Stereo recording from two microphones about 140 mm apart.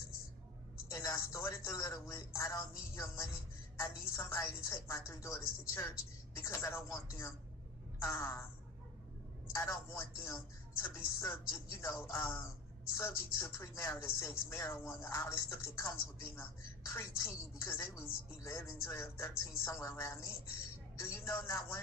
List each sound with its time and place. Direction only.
0.9 s speech: 20° left (ahead or behind)
9.6 s speech: 20° left (ahead or behind)